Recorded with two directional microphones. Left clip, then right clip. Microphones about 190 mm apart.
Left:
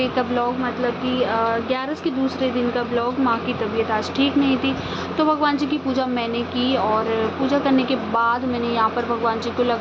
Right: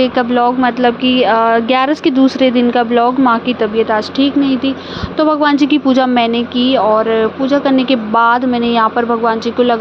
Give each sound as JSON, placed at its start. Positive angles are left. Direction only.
{"t": 0.0, "sound": "a woman's voice", "side_deg": -40}
{"t": 3.9, "sound": "a woman's voice", "side_deg": -30}